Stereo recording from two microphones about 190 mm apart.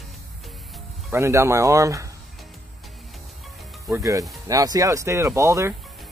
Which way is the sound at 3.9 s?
15° right (ahead or behind).